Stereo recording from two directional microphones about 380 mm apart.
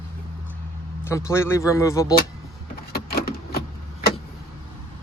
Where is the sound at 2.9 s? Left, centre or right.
Left.